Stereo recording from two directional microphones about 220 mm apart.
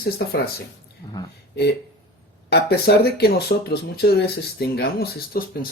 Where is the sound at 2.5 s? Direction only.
45° left (ahead or behind).